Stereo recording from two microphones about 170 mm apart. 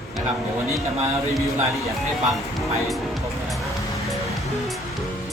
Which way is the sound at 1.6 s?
15° right (ahead or behind).